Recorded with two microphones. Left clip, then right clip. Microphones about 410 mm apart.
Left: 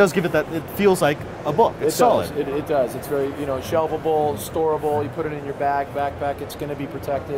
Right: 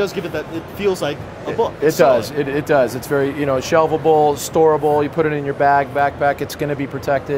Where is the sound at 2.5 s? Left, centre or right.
Right.